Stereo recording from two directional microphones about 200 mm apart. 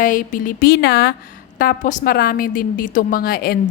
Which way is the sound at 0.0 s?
40° left (ahead or behind).